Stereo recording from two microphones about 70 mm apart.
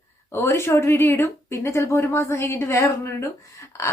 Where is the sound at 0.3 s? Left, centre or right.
Left.